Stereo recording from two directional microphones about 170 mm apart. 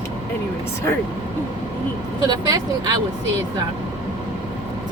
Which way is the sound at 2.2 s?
20° right (ahead or behind).